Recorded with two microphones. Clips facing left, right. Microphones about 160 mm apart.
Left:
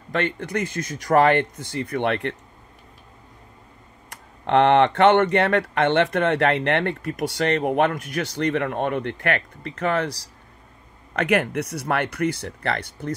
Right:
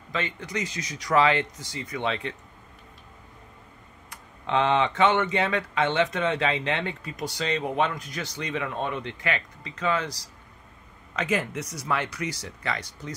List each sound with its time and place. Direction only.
0.1 s speech: 60° left (ahead or behind)
4.5 s speech: 65° left (ahead or behind)